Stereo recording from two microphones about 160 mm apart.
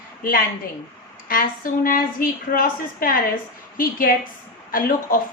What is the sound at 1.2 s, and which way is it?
A woman's voice, 60° left (ahead or behind).